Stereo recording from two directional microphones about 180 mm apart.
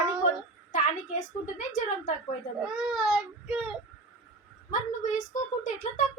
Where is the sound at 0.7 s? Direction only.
45° left (ahead or behind).